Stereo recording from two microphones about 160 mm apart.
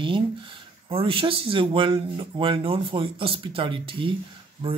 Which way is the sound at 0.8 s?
35° right (ahead or behind).